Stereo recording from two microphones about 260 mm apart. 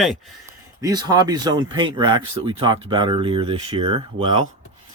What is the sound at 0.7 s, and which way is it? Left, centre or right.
Speech, centre.